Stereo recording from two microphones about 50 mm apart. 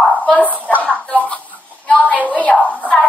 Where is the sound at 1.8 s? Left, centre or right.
Left.